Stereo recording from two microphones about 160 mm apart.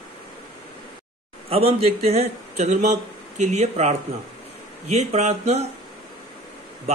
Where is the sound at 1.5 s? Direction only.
40° right (ahead or behind).